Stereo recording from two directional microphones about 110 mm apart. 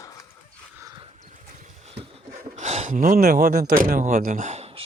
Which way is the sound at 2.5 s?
90° right.